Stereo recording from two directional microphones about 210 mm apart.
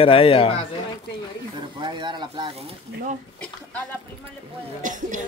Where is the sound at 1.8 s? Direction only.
20° right (ahead or behind).